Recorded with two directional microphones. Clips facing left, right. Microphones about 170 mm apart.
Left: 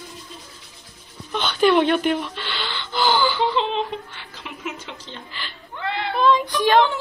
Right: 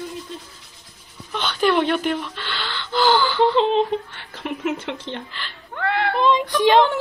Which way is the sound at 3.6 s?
50° right (ahead or behind).